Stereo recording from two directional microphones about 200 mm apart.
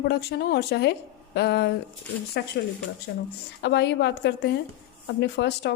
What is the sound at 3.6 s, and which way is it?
A woman's voice, 60° left (ahead or behind).